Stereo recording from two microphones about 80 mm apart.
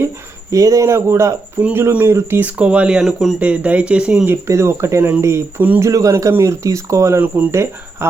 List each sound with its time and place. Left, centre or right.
0.5 s speech: right
2.4 s speech: centre
3.4 s speech: centre
4.4 s speech: right
5.5 s speech: right
5.8 s speech: right